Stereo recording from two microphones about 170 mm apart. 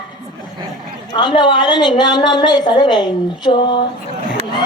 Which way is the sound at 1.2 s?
30° left (ahead or behind).